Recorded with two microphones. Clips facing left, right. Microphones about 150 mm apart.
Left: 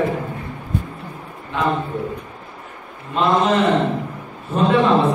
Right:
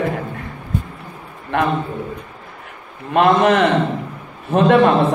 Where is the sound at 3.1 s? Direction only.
65° right (ahead or behind).